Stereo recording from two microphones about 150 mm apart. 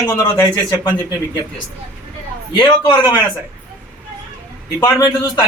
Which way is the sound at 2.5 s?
30° left (ahead or behind).